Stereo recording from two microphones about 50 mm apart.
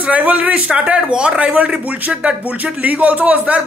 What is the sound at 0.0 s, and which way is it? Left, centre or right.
Speech, right.